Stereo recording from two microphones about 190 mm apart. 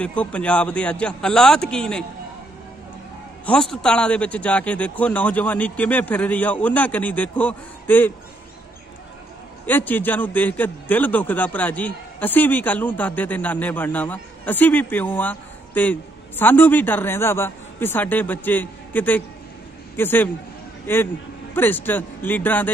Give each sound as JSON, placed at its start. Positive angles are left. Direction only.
{"t": 0.0, "sound": "a man's voice", "side_deg": 5}
{"t": 3.7, "sound": "a man's voice", "side_deg": 5}
{"t": 9.7, "sound": "a man's voice", "side_deg": 10}